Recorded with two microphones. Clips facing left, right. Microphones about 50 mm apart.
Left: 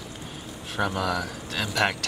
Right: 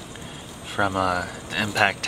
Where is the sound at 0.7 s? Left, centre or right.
Centre.